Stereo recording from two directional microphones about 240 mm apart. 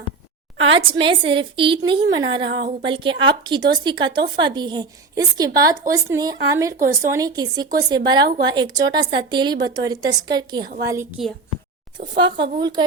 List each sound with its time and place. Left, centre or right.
0.6 s speech: right
12.2 s speech: centre